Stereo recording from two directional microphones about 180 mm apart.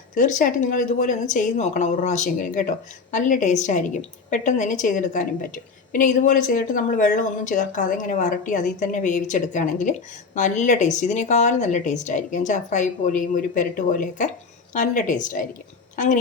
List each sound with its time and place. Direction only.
0.1 s a woman's voice: 45° left (ahead or behind)